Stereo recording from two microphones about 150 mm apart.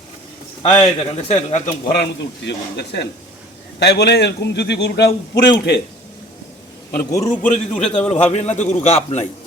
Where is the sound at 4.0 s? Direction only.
90° left.